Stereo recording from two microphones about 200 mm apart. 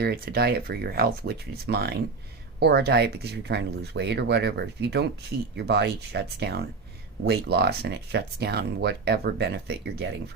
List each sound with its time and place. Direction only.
0.0 s speech: 50° right (ahead or behind)